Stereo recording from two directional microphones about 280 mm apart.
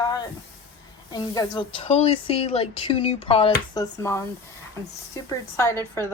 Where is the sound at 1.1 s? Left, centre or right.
Centre.